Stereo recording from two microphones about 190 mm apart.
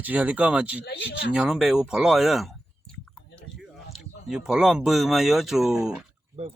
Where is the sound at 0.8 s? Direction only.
60° left (ahead or behind).